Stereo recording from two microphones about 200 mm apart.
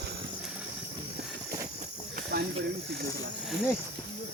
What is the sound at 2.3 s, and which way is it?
Snake, 50° right (ahead or behind).